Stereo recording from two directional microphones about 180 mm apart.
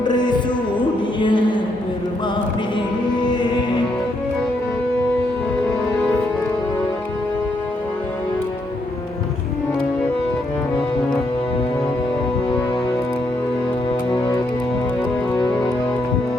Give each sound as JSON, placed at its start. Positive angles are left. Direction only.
{"t": 0.0, "sound": "music", "side_deg": 25}
{"t": 1.2, "sound": "a sound", "side_deg": 25}
{"t": 3.2, "sound": "music", "side_deg": 25}